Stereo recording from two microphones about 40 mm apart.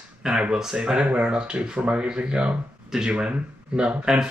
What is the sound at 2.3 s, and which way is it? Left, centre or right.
Speech, right.